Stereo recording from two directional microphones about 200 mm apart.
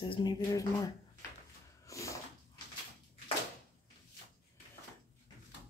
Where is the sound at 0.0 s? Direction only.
25° left (ahead or behind).